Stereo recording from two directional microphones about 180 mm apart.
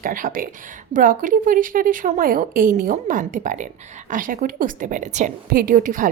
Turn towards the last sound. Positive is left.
turn(degrees=-50)  # may be behind; listen again after turning